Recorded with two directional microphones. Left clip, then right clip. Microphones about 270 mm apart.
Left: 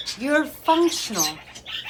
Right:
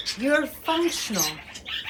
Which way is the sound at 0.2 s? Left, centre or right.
Centre.